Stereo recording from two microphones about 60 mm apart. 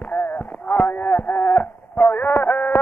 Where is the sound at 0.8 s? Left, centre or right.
Left.